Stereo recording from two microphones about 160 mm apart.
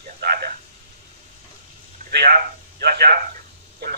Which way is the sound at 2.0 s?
75° right (ahead or behind).